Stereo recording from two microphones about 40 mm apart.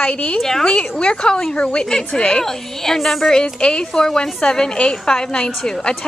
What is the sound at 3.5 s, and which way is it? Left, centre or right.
A woman's voice, centre.